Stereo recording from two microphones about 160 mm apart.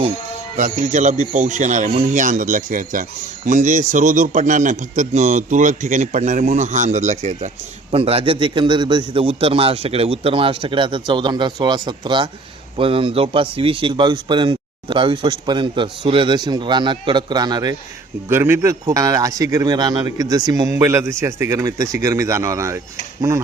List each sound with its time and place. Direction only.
0.5 s speech: 50° right (ahead or behind); by 17.7 s 25° right (ahead or behind)
18.3 s speech: 15° right (ahead or behind)